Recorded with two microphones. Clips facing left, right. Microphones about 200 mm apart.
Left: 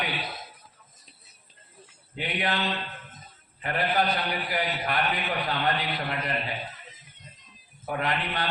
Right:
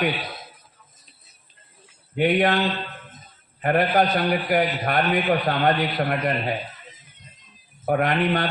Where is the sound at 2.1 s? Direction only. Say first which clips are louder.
Right 10 dB; 50° right (ahead or behind).